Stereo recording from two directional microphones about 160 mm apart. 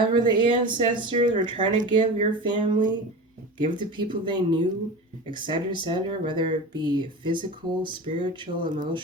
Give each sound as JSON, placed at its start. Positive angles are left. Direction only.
{"t": 0.0, "sound": "speech", "side_deg": -30}